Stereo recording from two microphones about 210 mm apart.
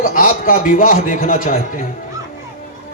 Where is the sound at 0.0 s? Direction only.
40° left (ahead or behind).